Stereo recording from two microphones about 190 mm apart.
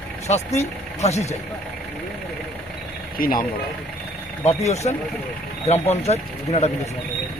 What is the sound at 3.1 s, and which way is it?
Speech, 50° left (ahead or behind).